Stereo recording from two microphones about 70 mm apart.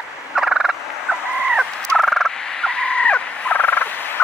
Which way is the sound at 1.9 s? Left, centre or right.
Centre.